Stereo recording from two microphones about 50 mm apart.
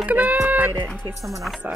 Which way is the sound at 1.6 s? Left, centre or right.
Right.